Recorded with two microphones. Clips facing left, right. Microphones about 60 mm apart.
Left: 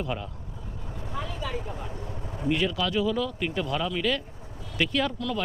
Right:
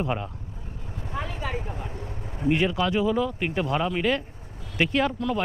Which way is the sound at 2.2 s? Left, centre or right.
Centre.